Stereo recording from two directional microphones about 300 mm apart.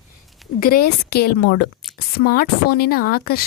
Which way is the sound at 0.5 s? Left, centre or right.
Left.